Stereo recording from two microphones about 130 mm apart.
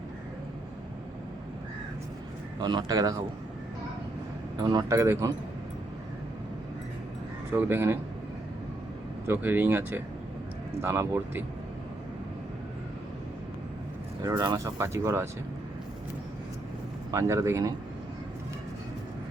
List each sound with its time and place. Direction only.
2.6 s speech: 35° right (ahead or behind)
4.5 s speech: 35° right (ahead or behind)
4.9 s speech: 20° right (ahead or behind)
7.5 s speech: 15° right (ahead or behind)
9.2 s speech: 15° right (ahead or behind)
14.3 s speech: 30° right (ahead or behind)
17.1 s speech: 25° right (ahead or behind)